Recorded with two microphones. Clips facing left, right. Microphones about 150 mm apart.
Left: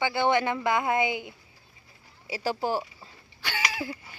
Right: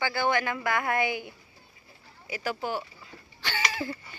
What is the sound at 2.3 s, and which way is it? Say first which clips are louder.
Speech: left 3 dB; 30° left (ahead or behind).